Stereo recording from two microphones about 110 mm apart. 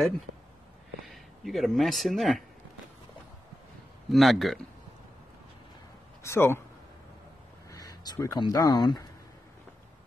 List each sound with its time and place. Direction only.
1.0 s speech: centre (ahead or behind)
4.1 s speech: centre (ahead or behind)
6.2 s speech: 25° left (ahead or behind)
7.7 s speech: 35° left (ahead or behind)